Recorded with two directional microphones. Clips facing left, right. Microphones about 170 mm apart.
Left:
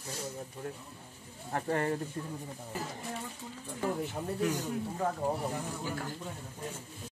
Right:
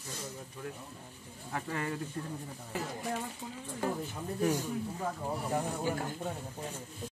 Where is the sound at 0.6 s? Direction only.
30° left (ahead or behind).